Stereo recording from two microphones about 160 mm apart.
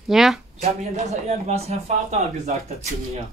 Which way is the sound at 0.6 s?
45° right (ahead or behind).